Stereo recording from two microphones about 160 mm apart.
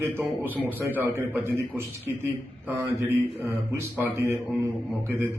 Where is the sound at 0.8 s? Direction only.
15° right (ahead or behind).